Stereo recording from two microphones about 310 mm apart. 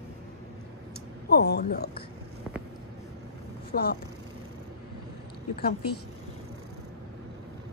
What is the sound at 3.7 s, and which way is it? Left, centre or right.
Speech, left.